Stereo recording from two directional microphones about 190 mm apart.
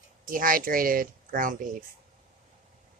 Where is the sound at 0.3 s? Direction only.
45° right (ahead or behind).